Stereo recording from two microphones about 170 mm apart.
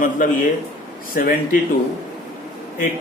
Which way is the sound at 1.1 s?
55° left (ahead or behind).